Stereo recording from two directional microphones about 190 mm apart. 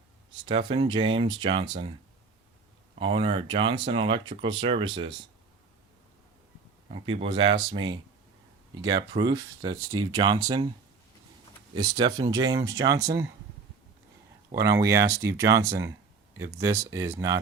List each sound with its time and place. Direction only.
0.4 s speech: 25° right (ahead or behind)
3.0 s speech: 30° right (ahead or behind)
6.8 s speech: 30° right (ahead or behind)
11.7 s speech: 25° right (ahead or behind)
14.5 s speech: 15° right (ahead or behind)